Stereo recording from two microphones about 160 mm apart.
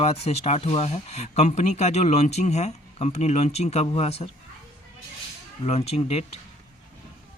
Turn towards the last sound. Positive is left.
turn(degrees=40)  # may be behind; listen again after turning